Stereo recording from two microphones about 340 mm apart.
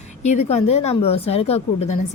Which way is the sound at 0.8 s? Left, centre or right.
Centre.